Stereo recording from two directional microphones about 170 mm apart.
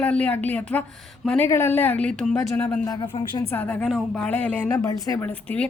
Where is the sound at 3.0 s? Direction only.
30° left (ahead or behind).